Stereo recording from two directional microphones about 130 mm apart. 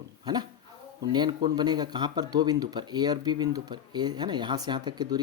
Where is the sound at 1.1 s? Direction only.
35° right (ahead or behind).